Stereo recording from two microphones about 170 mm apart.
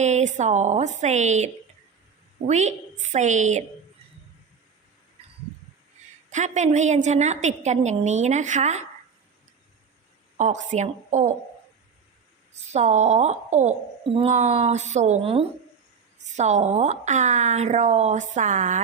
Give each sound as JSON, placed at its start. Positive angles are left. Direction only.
{"t": 0.0, "sound": "a child's voice", "side_deg": -45}
{"t": 2.5, "sound": "a child's voice", "side_deg": -40}
{"t": 6.3, "sound": "a child's voice", "side_deg": -45}
{"t": 10.3, "sound": "a child's voice", "side_deg": -45}
{"t": 12.7, "sound": "a child's voice", "side_deg": -40}